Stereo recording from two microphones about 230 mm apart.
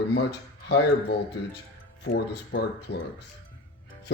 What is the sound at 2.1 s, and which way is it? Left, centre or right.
Speech, left.